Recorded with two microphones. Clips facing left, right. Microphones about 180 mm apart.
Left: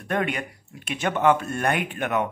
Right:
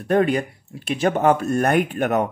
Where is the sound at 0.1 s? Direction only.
35° right (ahead or behind).